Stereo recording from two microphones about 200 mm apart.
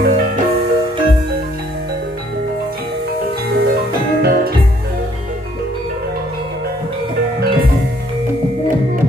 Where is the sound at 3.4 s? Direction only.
50° right (ahead or behind).